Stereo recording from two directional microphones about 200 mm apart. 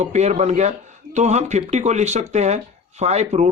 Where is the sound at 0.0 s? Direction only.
35° right (ahead or behind).